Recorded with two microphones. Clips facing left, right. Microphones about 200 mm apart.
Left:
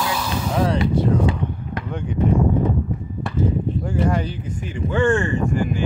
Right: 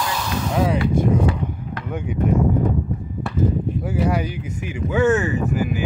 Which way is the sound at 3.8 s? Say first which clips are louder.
Even; 5° right (ahead or behind).